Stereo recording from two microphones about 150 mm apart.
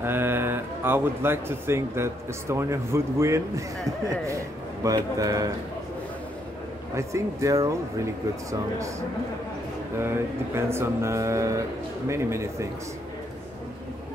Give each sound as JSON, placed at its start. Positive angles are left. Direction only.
{"t": 0.0, "sound": "speech", "side_deg": -15}
{"t": 4.8, "sound": "speech", "side_deg": -25}
{"t": 7.0, "sound": "speech", "side_deg": -20}
{"t": 9.9, "sound": "speech", "side_deg": -15}